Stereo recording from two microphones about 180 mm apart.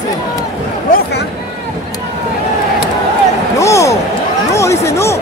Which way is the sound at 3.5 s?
15° left (ahead or behind).